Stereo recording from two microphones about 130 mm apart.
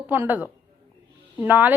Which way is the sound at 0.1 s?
15° right (ahead or behind).